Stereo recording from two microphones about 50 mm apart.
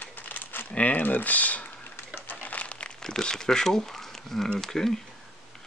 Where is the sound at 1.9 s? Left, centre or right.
Left; by 4.5 s centre.